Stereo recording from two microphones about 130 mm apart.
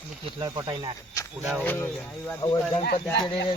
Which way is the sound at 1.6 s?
15° left (ahead or behind).